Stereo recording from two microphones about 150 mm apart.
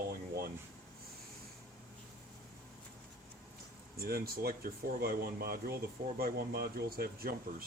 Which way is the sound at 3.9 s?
90° right.